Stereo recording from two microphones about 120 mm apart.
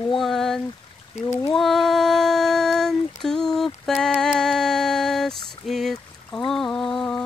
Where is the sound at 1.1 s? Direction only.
70° left (ahead or behind).